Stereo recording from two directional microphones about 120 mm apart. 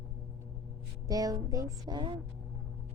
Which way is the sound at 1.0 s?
30° right (ahead or behind).